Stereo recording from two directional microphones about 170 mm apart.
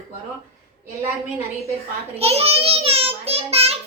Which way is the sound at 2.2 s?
35° right (ahead or behind).